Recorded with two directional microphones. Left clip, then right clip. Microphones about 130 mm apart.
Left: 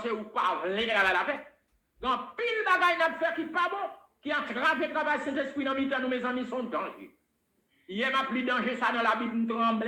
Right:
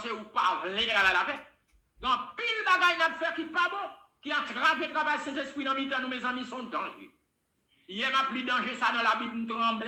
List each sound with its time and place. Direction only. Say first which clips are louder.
0.0 s a man's voice: even; 30° left (ahead or behind)